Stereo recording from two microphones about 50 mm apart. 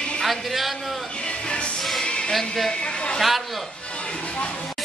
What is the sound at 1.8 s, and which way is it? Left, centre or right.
Music, centre.